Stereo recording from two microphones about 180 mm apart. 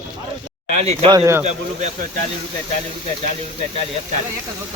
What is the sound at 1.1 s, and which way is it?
Speech, 20° right (ahead or behind).